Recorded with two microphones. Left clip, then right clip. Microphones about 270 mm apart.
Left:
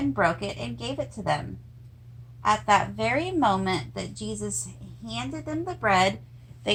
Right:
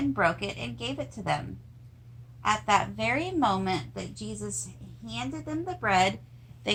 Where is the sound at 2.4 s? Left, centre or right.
Centre.